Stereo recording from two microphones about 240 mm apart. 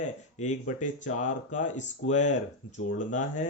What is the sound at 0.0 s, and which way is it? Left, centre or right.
Speech, left.